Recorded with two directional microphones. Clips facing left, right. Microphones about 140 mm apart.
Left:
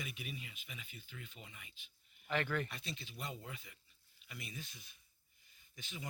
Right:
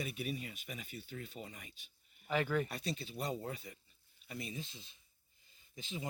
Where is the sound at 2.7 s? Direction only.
40° right (ahead or behind).